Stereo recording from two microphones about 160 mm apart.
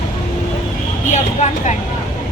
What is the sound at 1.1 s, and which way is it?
Speech, 45° left (ahead or behind).